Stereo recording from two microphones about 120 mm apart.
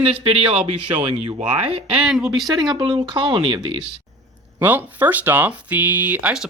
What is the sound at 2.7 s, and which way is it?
Speech, 40° right (ahead or behind).